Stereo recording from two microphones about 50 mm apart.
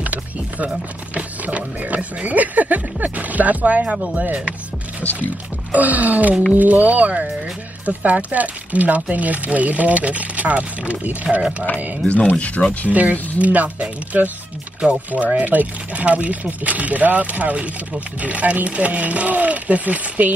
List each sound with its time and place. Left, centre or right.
0.0 s music: right
1.1 s speech: right
5.0 s speech: left
5.7 s speech: right
12.3 s speech: left
12.9 s speech: right